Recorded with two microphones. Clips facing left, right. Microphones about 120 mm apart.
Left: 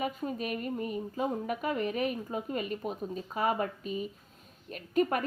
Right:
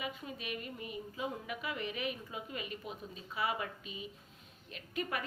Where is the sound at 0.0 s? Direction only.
45° left (ahead or behind).